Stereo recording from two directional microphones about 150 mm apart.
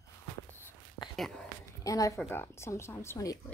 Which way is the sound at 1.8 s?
20° left (ahead or behind).